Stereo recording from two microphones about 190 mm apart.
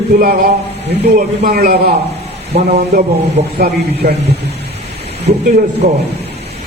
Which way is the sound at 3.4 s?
60° right (ahead or behind).